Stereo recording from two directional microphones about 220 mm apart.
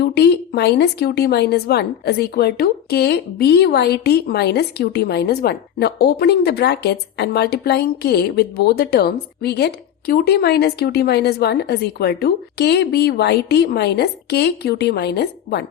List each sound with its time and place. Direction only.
0.0 s speech: 45° left (ahead or behind)